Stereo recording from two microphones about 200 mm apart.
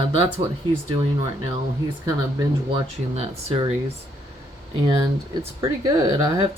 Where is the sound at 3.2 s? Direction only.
30° right (ahead or behind).